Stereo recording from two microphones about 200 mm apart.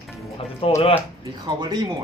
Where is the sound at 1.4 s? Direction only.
20° right (ahead or behind).